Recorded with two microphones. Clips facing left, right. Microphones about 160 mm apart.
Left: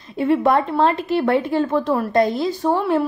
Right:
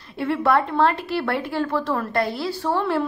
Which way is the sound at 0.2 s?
20° left (ahead or behind).